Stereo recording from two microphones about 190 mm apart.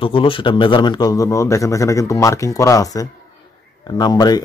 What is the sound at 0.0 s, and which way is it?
Speech, 25° left (ahead or behind).